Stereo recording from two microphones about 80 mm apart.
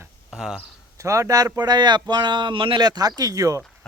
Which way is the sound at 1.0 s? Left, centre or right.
Right.